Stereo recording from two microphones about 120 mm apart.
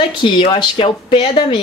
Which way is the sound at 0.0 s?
45° left (ahead or behind).